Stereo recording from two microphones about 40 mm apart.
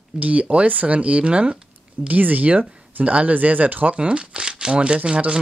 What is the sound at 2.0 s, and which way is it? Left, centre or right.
Speech, right.